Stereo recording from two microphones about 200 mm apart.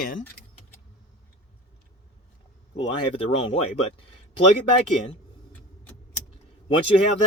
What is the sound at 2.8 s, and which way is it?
Speech, 30° left (ahead or behind).